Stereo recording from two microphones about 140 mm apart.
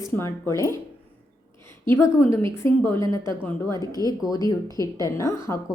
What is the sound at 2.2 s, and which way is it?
Speech, 40° right (ahead or behind).